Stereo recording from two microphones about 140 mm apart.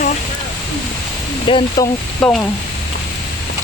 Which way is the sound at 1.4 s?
35° left (ahead or behind).